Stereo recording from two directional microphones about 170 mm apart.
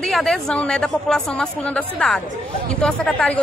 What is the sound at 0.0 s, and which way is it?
A woman's voice, centre (ahead or behind).